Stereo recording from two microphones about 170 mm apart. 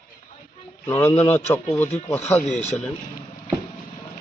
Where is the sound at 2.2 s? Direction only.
40° left (ahead or behind).